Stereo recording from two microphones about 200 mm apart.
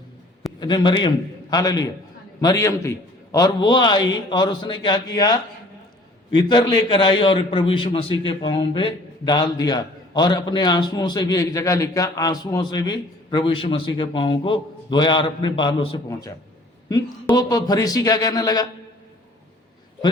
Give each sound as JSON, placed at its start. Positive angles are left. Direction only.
{"t": 0.6, "sound": "a man's voice", "side_deg": 20}
{"t": 17.3, "sound": "a man's voice", "side_deg": 20}